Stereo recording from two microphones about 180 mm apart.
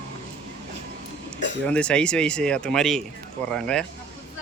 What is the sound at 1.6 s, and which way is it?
Speech, 5° left (ahead or behind).